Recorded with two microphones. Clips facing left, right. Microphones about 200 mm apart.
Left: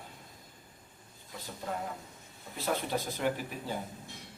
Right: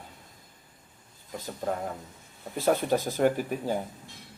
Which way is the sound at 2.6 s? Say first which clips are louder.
Right 8 dB; 45° right (ahead or behind).